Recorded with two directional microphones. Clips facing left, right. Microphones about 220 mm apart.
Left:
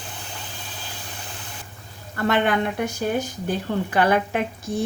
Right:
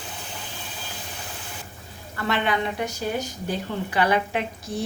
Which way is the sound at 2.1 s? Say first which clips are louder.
Left 4 dB; 50° left (ahead or behind).